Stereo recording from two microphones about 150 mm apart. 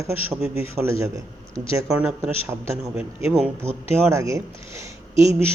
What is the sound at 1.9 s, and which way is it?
A man's voice, 5° right (ahead or behind).